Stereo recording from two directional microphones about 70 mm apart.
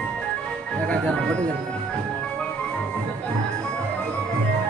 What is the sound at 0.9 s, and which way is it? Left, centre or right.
Speech, centre.